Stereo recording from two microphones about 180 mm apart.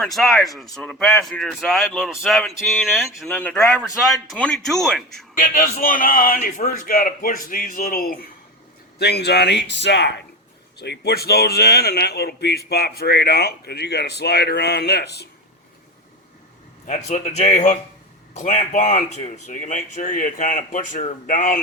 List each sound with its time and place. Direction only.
0.0 s speech: centre (ahead or behind)
5.4 s speech: 50° left (ahead or behind); by 10.1 s 75° left (ahead or behind)
10.8 s a man's voice: 65° left (ahead or behind)
17.1 s speech: 40° left (ahead or behind)